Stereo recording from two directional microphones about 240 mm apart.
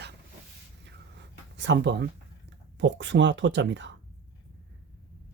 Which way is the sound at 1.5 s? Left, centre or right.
Right.